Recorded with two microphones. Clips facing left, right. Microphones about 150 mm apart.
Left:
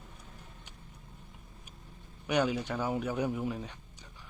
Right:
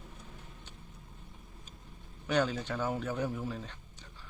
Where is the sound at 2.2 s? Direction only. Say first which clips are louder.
Left 1 dB; 15° left (ahead or behind).